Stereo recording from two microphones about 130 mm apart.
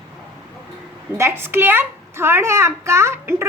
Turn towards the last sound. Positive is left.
turn(degrees=-20)  # may be behind; listen again after turning